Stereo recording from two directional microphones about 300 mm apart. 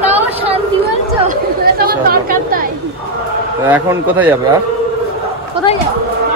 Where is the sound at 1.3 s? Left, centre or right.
Right.